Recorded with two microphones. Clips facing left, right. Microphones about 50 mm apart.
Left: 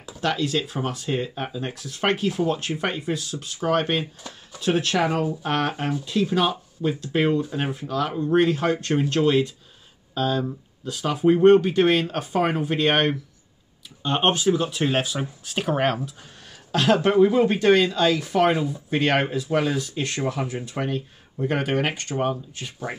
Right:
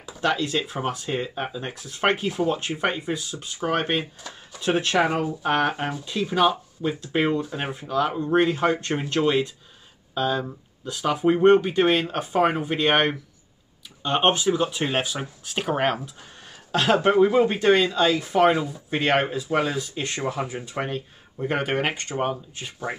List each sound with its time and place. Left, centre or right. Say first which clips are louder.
0.0 s speech: right 1 dB; centre